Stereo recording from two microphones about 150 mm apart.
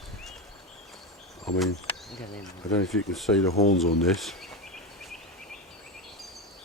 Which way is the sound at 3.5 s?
45° left (ahead or behind).